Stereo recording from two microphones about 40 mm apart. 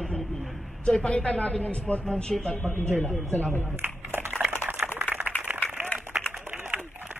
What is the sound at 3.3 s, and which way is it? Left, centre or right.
Speech, left.